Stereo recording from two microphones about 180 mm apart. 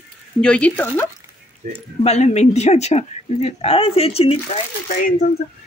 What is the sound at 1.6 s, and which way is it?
Speech, 50° right (ahead or behind).